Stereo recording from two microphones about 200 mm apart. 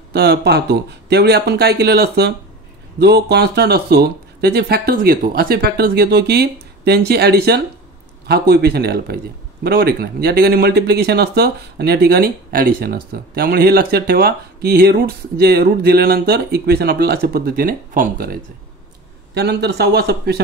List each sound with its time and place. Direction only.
0.1 s speech: 55° right (ahead or behind)